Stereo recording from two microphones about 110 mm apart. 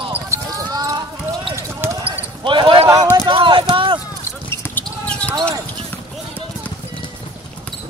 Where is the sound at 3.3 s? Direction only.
50° right (ahead or behind).